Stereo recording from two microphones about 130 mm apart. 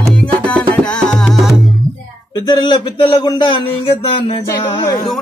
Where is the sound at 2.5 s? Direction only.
35° left (ahead or behind).